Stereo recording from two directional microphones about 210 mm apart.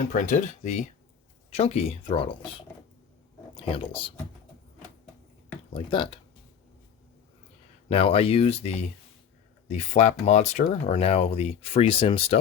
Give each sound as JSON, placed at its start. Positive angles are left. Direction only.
{"t": 0.1, "sound": "speech", "side_deg": 35}
{"t": 3.7, "sound": "speech", "side_deg": 25}
{"t": 5.7, "sound": "speech", "side_deg": 25}
{"t": 7.9, "sound": "speech", "side_deg": 25}